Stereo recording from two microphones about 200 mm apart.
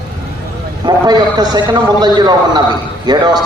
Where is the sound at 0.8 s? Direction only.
20° right (ahead or behind).